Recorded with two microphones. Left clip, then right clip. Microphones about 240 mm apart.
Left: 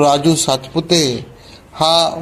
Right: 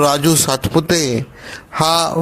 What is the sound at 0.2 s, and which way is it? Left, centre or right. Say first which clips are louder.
Speech: even; right.